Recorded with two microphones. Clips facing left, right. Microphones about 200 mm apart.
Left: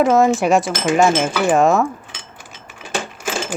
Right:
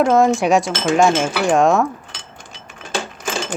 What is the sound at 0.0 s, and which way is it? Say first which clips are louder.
Speech: even; centre (ahead or behind).